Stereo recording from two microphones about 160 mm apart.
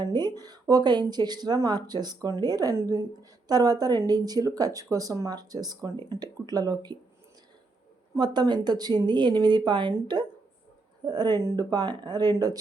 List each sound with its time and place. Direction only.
0.0 s speech: 25° right (ahead or behind)
8.1 s speech: 25° right (ahead or behind)